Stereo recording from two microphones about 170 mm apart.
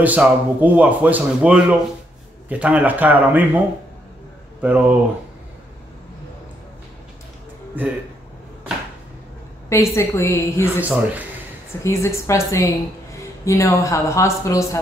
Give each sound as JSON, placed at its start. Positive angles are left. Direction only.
{"t": 0.0, "sound": "speech", "side_deg": -10}
{"t": 4.6, "sound": "speech", "side_deg": -10}
{"t": 7.8, "sound": "speech", "side_deg": -10}
{"t": 9.7, "sound": "speech", "side_deg": 15}
{"t": 10.8, "sound": "speech", "side_deg": -10}
{"t": 11.8, "sound": "speech", "side_deg": 15}